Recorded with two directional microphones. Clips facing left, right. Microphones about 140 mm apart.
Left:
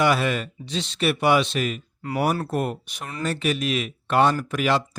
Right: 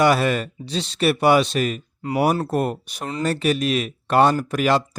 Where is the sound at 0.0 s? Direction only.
40° right (ahead or behind).